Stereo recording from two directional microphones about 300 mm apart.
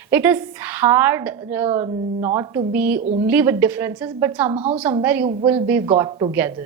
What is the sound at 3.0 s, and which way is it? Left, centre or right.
Speech, right.